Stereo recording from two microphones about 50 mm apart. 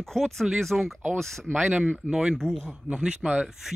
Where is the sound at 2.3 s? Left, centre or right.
Centre.